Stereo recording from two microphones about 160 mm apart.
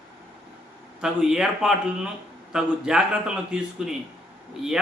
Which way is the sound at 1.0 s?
5° right (ahead or behind).